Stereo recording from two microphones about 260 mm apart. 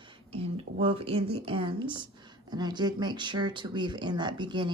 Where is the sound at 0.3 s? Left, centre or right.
Right.